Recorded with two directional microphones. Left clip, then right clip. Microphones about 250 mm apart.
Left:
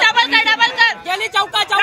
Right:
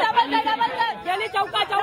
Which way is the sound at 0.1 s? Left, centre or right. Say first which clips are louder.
Left 6 dB; centre.